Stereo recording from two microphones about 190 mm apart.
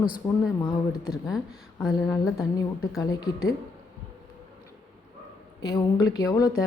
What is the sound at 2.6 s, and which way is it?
Speech, 20° left (ahead or behind).